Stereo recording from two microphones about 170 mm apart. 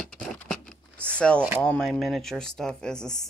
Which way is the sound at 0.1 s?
Centre (ahead or behind).